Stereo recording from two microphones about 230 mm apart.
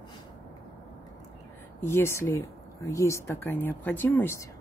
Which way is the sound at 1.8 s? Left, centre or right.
Centre.